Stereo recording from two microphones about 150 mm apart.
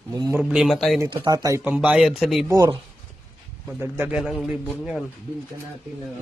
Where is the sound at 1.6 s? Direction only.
10° right (ahead or behind).